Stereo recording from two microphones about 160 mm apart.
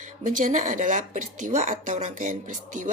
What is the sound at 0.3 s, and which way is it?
A woman's voice, 55° right (ahead or behind).